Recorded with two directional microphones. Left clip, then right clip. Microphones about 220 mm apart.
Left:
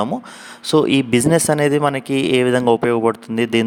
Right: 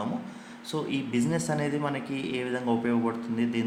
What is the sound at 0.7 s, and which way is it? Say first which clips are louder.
Speech: left 16 dB; 45° left (ahead or behind).